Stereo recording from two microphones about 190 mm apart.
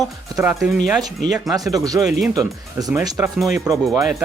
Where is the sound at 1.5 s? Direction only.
20° right (ahead or behind).